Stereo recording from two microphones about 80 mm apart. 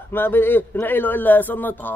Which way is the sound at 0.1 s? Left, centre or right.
Left.